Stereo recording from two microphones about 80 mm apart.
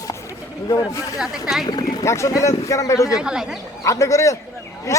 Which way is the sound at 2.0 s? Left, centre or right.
Left.